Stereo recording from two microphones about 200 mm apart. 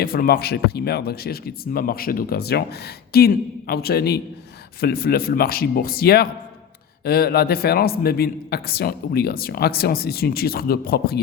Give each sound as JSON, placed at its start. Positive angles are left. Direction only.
{"t": 0.0, "sound": "a man's voice", "side_deg": 45}